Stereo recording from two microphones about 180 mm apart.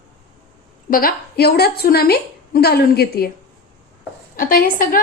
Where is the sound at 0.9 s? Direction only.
55° left (ahead or behind).